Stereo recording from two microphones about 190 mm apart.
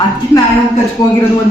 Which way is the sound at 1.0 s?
20° left (ahead or behind).